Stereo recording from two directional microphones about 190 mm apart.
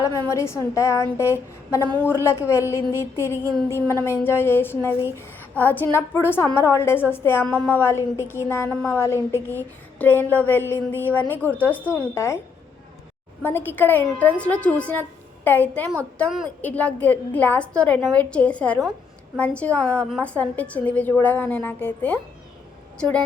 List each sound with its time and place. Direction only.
0.0 s a woman's voice: 15° left (ahead or behind)
13.4 s a woman's voice: 10° left (ahead or behind)